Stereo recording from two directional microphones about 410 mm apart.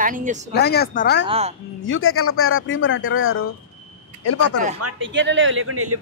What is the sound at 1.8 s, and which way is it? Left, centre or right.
Speech, left.